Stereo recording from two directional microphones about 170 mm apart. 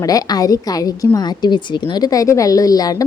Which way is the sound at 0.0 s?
20° left (ahead or behind).